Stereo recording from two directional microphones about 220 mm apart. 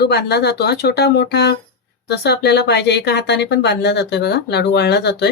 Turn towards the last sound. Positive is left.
turn(degrees=50)  # may be behind; listen again after turning